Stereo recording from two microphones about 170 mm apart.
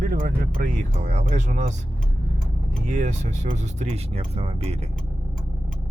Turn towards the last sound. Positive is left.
turn(degrees=-40)  # may be behind; listen again after turning